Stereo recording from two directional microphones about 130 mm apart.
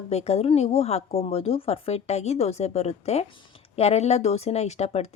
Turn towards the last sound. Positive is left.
turn(degrees=55)  # may be behind; listen again after turning